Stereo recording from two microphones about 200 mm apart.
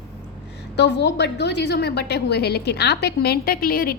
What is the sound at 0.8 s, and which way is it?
A woman's voice, 60° left (ahead or behind).